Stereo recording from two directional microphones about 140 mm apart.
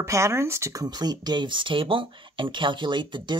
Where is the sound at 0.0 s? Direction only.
20° right (ahead or behind).